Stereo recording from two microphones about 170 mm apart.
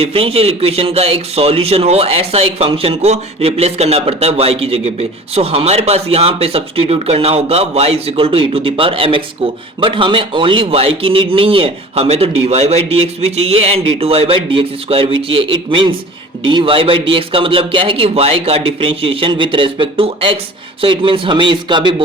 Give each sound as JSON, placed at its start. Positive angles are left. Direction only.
{"t": 0.0, "sound": "speech", "side_deg": -35}